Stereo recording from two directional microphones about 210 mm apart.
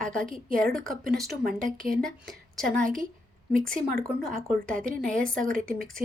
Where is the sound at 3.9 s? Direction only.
45° right (ahead or behind).